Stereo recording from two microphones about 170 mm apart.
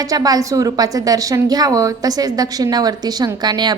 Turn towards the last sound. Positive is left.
turn(degrees=-25)  # may be behind; listen again after turning